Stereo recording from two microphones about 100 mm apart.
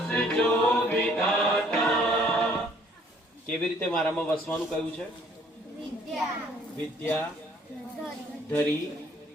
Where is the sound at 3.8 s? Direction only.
5° left (ahead or behind).